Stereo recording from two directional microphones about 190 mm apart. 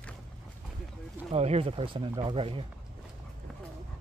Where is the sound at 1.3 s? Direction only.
35° right (ahead or behind).